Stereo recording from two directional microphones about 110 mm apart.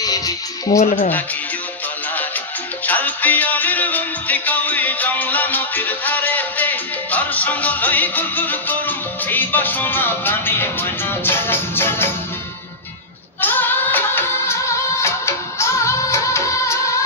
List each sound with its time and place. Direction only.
0.7 s speech: 90° left
2.9 s music: 15° left (ahead or behind)
13.4 s music: 15° left (ahead or behind)